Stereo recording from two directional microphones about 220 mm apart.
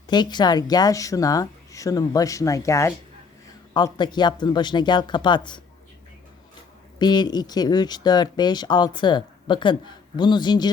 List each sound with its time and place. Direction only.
0.1 s a woman's voice: 20° left (ahead or behind)
7.0 s speech: 20° left (ahead or behind)